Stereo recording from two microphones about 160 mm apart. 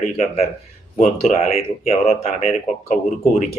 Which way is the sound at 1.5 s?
40° left (ahead or behind).